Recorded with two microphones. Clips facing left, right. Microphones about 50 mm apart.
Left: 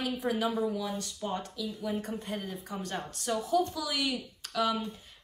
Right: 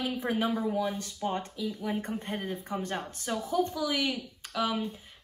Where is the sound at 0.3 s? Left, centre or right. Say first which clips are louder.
Right 1 dB; right.